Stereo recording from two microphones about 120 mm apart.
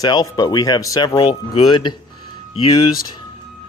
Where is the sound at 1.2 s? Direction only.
50° left (ahead or behind).